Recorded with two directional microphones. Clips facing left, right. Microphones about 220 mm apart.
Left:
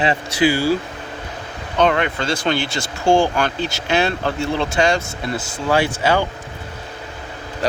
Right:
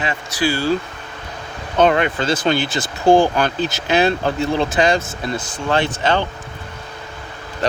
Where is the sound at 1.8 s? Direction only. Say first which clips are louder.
Right 2 dB; 40° right (ahead or behind).